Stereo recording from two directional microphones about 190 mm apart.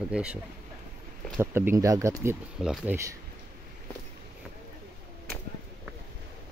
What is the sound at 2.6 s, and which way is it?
Speech, 5° right (ahead or behind).